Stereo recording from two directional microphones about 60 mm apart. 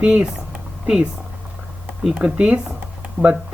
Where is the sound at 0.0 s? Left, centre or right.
Centre.